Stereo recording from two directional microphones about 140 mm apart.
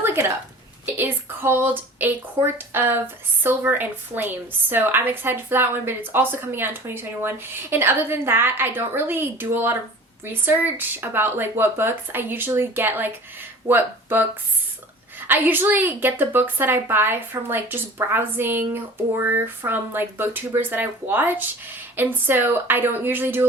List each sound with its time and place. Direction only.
0.0 s a sound: 15° right (ahead or behind)
0.9 s a woman's voice: 15° right (ahead or behind)
15.3 s a woman's voice: 15° right (ahead or behind)